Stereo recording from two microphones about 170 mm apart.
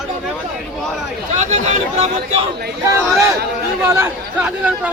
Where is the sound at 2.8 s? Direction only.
15° right (ahead or behind).